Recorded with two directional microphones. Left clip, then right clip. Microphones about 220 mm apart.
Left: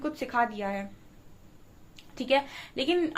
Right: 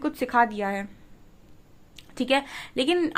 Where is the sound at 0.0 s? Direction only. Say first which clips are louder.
Right 6 dB; 45° right (ahead or behind).